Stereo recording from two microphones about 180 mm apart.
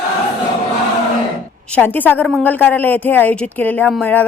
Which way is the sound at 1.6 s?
10° left (ahead or behind).